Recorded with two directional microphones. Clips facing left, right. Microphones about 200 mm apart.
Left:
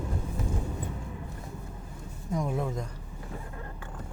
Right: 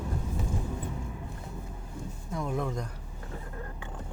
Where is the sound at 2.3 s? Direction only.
5° left (ahead or behind).